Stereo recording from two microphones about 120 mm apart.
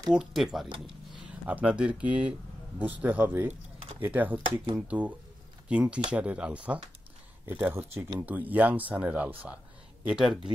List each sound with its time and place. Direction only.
0.1 s speech: 5° right (ahead or behind)
1.4 s speech: 10° right (ahead or behind)